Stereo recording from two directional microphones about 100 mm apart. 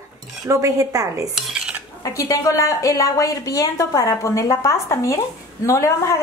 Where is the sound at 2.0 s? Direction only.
35° left (ahead or behind).